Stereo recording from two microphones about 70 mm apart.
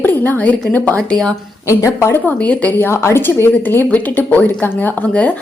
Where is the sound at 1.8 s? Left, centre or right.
Left.